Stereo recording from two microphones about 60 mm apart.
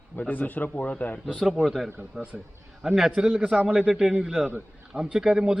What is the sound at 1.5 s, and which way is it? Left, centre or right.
A man's voice, centre.